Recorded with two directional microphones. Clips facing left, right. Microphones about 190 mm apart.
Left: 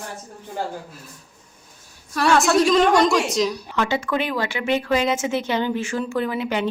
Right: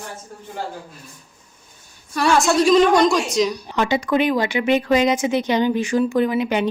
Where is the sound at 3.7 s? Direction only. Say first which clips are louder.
Right 3 dB; 15° right (ahead or behind).